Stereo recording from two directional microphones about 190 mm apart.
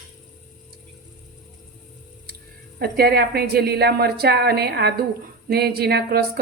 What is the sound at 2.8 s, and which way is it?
A woman's voice, 55° right (ahead or behind).